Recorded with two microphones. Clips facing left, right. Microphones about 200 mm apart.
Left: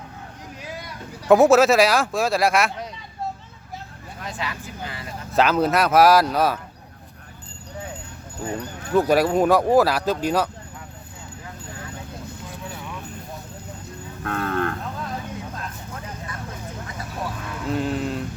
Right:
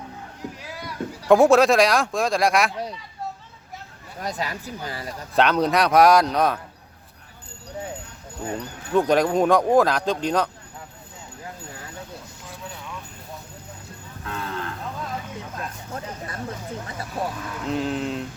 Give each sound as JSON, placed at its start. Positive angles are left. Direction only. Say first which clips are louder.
{"t": 1.3, "sound": "speech", "louder": "left 1 dB", "side_deg": 5}
{"t": 4.2, "sound": "speech", "louder": "right 3 dB", "side_deg": -40}
{"t": 5.3, "sound": "speech", "louder": "left 1 dB", "side_deg": 5}
{"t": 8.9, "sound": "speech", "louder": "left 1 dB", "side_deg": 5}
{"t": 14.3, "sound": "moo", "louder": "left 7 dB", "side_deg": 55}
{"t": 17.7, "sound": "a sound", "louder": "left 1 dB", "side_deg": 0}